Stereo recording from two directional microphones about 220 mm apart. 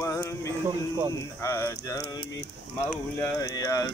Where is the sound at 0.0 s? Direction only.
15° left (ahead or behind).